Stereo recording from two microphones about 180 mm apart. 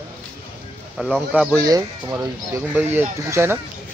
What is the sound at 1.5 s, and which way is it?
Speech, 20° right (ahead or behind).